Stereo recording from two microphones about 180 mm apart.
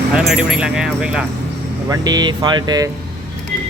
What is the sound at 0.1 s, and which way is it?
Speech, 5° right (ahead or behind).